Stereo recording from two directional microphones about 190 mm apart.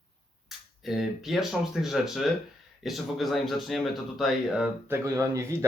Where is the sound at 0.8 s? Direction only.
Centre (ahead or behind).